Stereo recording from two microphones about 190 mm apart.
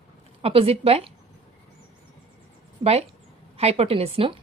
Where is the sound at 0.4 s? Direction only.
30° right (ahead or behind).